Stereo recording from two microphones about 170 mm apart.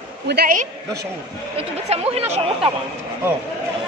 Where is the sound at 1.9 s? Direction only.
35° right (ahead or behind).